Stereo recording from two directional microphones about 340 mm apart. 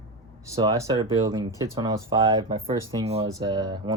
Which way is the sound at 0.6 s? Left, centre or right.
Centre.